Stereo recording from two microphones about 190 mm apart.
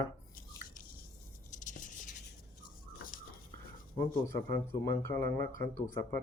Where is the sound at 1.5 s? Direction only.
40° left (ahead or behind).